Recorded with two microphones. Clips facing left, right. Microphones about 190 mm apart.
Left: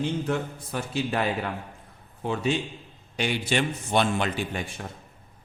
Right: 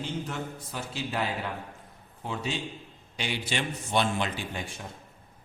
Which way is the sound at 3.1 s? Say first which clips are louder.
Left 6 dB; 50° left (ahead or behind).